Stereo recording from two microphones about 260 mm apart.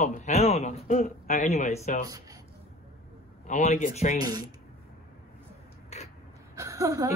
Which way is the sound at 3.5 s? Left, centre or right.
Left.